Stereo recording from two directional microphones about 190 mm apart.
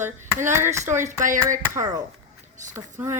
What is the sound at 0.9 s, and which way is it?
Speech, 40° right (ahead or behind).